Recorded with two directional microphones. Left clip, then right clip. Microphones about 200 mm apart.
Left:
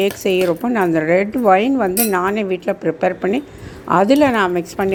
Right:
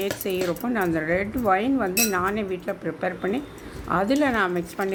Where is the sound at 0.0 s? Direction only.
30° left (ahead or behind).